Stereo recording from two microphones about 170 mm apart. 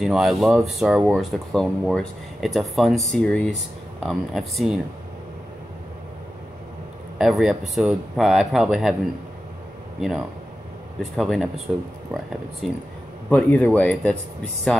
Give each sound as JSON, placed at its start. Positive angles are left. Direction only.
{"t": 0.0, "sound": "speech", "side_deg": 0}
{"t": 7.2, "sound": "speech", "side_deg": 0}
{"t": 9.9, "sound": "speech", "side_deg": 0}
{"t": 13.3, "sound": "speech", "side_deg": 10}